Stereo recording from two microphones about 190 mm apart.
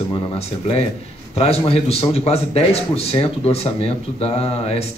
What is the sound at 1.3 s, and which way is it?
A man's voice, 30° left (ahead or behind).